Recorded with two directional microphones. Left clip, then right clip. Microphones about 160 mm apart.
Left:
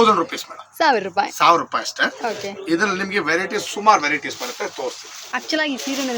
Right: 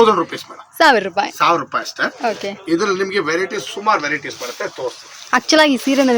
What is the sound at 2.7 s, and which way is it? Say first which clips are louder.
Speech: right 2 dB; 10° left (ahead or behind).